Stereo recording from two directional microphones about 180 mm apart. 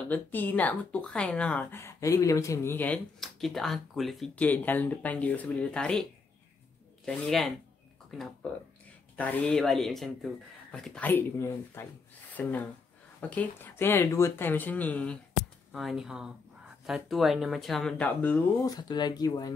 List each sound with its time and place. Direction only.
0.1 s speech: 10° left (ahead or behind)
7.1 s speech: centre (ahead or behind)
9.1 s speech: 10° left (ahead or behind)
18.7 s speech: 25° left (ahead or behind)